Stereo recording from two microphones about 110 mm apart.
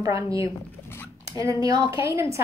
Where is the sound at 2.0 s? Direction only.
25° right (ahead or behind).